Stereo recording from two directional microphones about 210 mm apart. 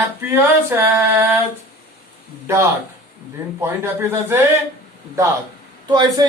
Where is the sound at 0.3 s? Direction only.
10° right (ahead or behind).